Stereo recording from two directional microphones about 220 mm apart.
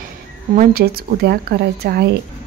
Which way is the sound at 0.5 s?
45° right (ahead or behind).